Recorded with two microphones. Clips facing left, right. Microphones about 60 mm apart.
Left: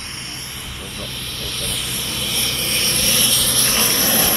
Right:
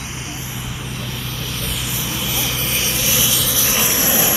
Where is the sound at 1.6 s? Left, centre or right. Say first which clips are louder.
Right 1 dB; centre.